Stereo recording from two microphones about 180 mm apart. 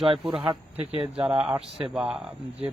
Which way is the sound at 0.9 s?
30° right (ahead or behind).